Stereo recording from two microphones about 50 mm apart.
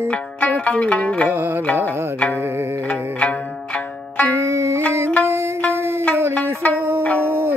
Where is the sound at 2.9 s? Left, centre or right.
Left.